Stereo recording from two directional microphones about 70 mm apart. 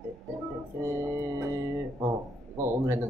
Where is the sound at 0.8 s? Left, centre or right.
Right.